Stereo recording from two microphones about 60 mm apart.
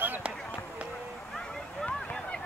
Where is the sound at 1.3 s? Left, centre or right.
Centre.